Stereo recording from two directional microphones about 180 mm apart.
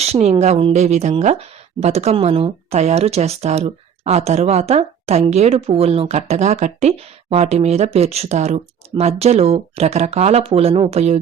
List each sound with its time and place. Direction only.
0.0 s a woman's voice: 35° right (ahead or behind)